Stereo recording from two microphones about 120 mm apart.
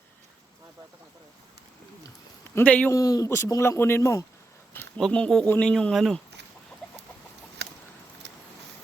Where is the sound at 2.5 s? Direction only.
10° left (ahead or behind).